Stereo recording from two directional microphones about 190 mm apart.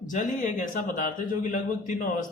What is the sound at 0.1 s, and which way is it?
Speech, 45° left (ahead or behind).